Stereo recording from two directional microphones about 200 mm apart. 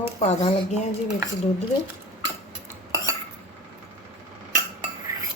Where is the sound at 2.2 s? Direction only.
15° right (ahead or behind).